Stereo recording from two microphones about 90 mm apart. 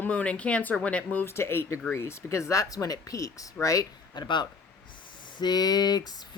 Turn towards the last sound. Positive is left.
turn(degrees=45)  # may be behind; listen again after turning